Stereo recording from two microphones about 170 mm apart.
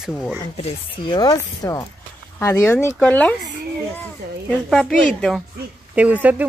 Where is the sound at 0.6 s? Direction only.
25° left (ahead or behind); by 3.3 s 5° left (ahead or behind).